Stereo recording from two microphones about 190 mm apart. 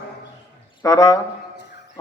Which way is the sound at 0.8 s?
20° left (ahead or behind).